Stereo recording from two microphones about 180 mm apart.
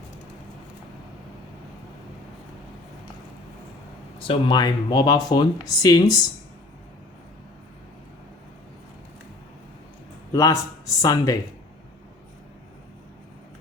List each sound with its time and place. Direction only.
4.3 s speech: 25° left (ahead or behind)
10.3 s speech: 20° left (ahead or behind)